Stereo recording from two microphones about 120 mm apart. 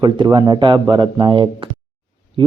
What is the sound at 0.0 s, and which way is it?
A man's voice, 35° right (ahead or behind).